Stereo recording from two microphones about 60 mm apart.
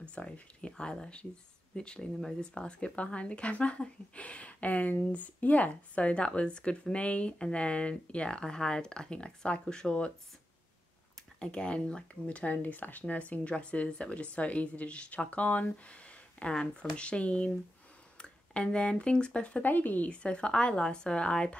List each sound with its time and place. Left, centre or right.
0.0 s a woman's voice: centre
11.3 s speech: centre
19.6 s speech: left
20.1 s a woman's voice: centre